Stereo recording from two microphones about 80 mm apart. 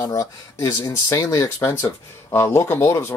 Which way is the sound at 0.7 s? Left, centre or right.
Left.